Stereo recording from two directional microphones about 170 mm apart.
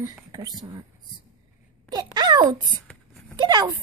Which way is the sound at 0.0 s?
20° right (ahead or behind).